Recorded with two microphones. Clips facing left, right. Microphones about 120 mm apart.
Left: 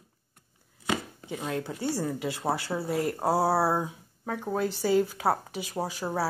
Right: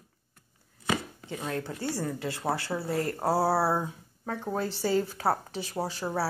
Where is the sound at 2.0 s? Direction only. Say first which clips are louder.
Left 1 dB; 20° left (ahead or behind).